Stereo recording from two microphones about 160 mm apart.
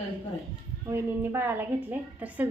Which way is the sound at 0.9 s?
15° right (ahead or behind).